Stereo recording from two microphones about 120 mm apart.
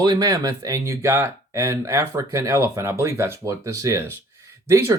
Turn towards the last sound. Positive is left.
turn(degrees=-25)  # may be behind; listen again after turning